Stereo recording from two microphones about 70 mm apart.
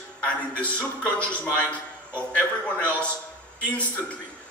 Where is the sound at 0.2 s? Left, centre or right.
Centre.